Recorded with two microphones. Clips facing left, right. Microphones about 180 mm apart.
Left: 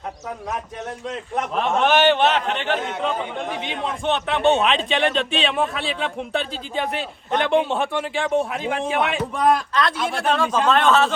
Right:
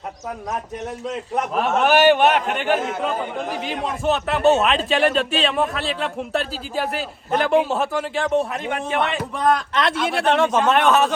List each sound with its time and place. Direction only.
1.5 s a man's voice: 5° right (ahead or behind)
10.3 s speech: 20° right (ahead or behind)